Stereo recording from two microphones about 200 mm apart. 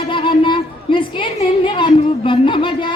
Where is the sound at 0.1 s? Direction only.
25° left (ahead or behind).